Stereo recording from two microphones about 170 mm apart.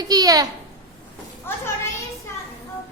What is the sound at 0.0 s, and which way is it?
Speech, 20° right (ahead or behind).